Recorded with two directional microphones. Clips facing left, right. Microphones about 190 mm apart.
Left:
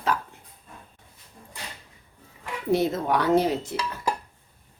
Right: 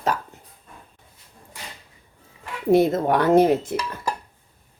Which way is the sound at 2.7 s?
50° right (ahead or behind).